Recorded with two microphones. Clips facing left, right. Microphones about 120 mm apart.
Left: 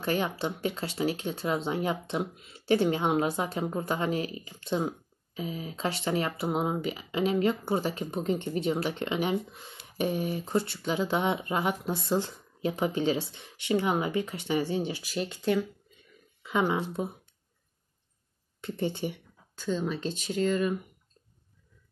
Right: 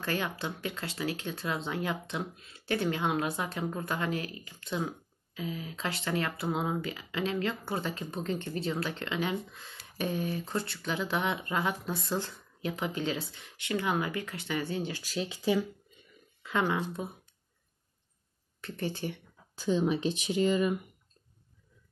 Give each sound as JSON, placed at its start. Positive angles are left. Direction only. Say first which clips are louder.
{"t": 0.0, "sound": "speech", "louder": "left 4 dB", "side_deg": 25}
{"t": 15.1, "sound": "speech", "louder": "left 1 dB", "side_deg": 0}
{"t": 16.4, "sound": "speech", "louder": "left 2 dB", "side_deg": 10}
{"t": 18.6, "sound": "speech", "louder": "left 4 dB", "side_deg": 20}
{"t": 19.6, "sound": "speech", "louder": "right 3 dB", "side_deg": -10}